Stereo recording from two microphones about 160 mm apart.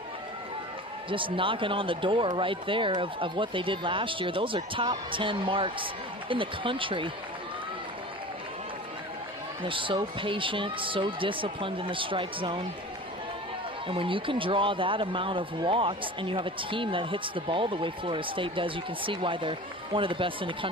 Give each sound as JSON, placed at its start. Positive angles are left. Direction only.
{"t": 1.1, "sound": "a man's voice", "side_deg": -30}
{"t": 9.7, "sound": "a man's voice", "side_deg": -30}
{"t": 13.8, "sound": "a man's voice", "side_deg": -35}